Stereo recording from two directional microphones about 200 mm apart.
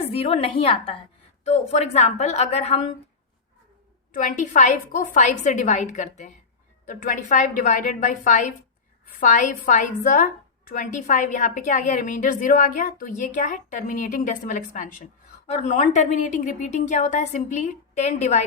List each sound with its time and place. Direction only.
0.0 s a woman's voice: 30° left (ahead or behind)
4.1 s a woman's voice: 40° left (ahead or behind)